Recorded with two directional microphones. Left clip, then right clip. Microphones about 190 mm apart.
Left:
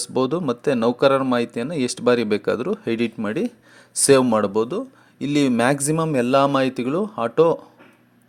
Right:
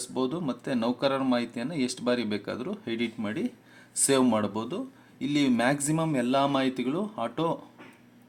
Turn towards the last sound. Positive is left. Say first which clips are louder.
# left 12 dB
turn(degrees=35)  # may be behind; listen again after turning